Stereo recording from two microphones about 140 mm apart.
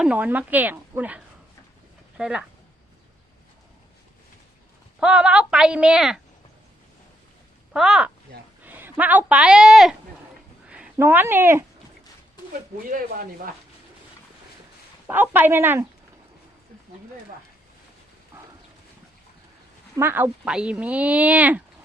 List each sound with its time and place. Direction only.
0.0 s speech: 10° right (ahead or behind)
4.9 s speech: 10° right (ahead or behind)
7.7 s speech: 5° right (ahead or behind)
10.9 s speech: 15° right (ahead or behind)
12.9 s speech: 90° right
15.0 s speech: 15° right (ahead or behind)
20.0 s speech: 15° right (ahead or behind)